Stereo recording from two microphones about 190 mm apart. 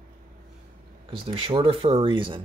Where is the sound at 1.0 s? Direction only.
25° right (ahead or behind).